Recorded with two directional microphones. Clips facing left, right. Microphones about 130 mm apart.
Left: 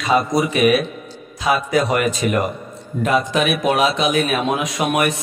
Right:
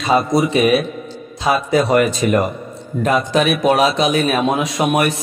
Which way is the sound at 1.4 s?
30° right (ahead or behind).